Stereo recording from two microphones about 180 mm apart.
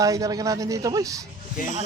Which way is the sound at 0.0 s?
20° right (ahead or behind).